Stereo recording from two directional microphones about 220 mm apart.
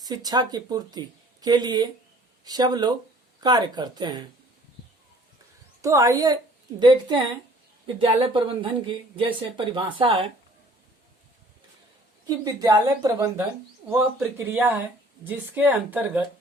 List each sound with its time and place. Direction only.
0.0 s speech: 15° right (ahead or behind)
5.8 s speech: 15° right (ahead or behind)
12.5 s speech: 15° right (ahead or behind)